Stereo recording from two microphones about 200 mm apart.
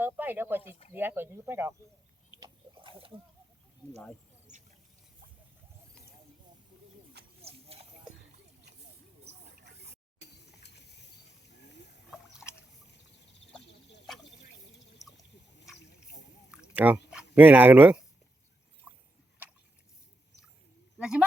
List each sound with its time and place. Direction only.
0.0 s speech: 10° right (ahead or behind)
2.4 s pig: 25° right (ahead or behind)
3.8 s speech: 5° left (ahead or behind)
7.4 s clip-clop: 30° right (ahead or behind)
10.2 s a sound: 55° left (ahead or behind)
12.1 s a sound: 5° right (ahead or behind)
16.7 s speech: 10° right (ahead or behind)
18.9 s a sound: 5° right (ahead or behind)
21.0 s speech: 5° right (ahead or behind)